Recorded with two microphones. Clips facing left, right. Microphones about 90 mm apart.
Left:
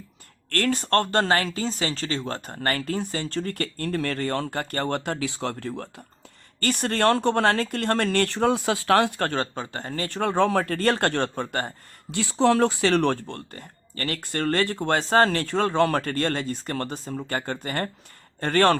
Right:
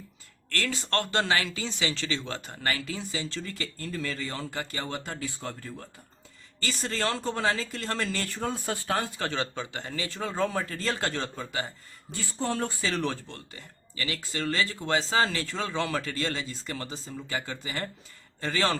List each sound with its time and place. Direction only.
0.5 s speech: 50° left (ahead or behind)
12.1 s speech: 90° left; by 18.8 s 55° left (ahead or behind)